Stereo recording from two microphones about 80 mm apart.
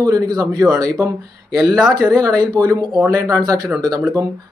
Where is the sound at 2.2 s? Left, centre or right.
Right.